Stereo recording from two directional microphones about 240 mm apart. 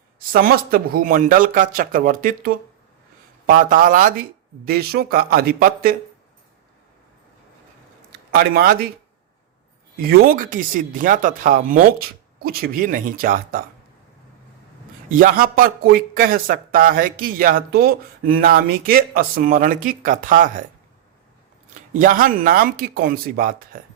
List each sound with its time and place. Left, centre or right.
0.2 s a man's voice: right
8.4 s a man's voice: right
10.0 s a man's voice: right
15.1 s a man's voice: right
21.9 s a man's voice: right